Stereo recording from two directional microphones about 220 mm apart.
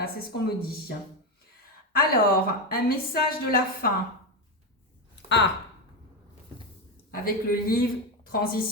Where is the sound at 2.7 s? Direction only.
45° left (ahead or behind).